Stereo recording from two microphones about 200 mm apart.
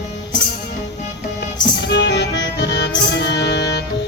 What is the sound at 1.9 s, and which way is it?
Music, 60° left (ahead or behind).